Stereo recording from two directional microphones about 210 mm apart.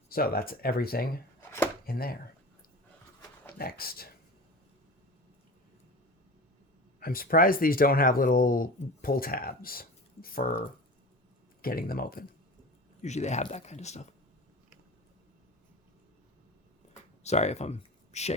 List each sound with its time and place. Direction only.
0.1 s speech: 45° left (ahead or behind)
1.4 s chopping: 10° left (ahead or behind)
1.9 s speech: 45° left (ahead or behind)
3.6 s speech: 45° left (ahead or behind)
7.0 s speech: 45° left (ahead or behind)
11.6 s speech: 45° left (ahead or behind)
13.0 s speech: 35° left (ahead or behind)
17.2 s speech: 30° left (ahead or behind)